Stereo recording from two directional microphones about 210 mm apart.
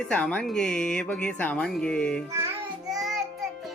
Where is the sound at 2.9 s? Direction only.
Centre (ahead or behind).